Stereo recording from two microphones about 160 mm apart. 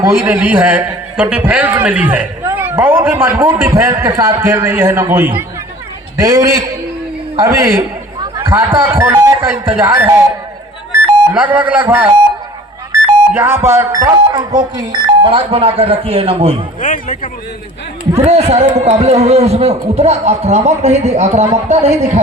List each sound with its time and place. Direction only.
0.0 s a man's voice: 15° right (ahead or behind)
11.3 s a man's voice: 10° right (ahead or behind); by 16.6 s 40° right (ahead or behind)
16.8 s speech: 50° left (ahead or behind)
18.2 s a man's voice: 40° right (ahead or behind)